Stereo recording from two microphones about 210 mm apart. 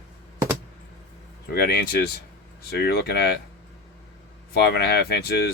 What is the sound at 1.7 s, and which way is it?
Speech, 45° left (ahead or behind).